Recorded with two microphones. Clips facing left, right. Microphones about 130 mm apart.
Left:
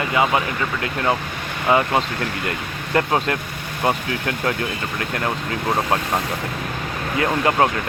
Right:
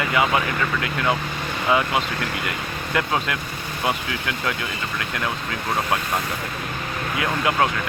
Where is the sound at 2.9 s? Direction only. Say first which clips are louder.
Left 4 dB; 40° left (ahead or behind).